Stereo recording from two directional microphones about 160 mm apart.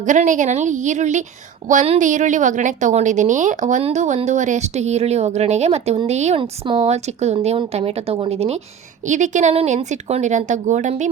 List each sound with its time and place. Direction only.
0.0 s a woman's voice: 50° right (ahead or behind)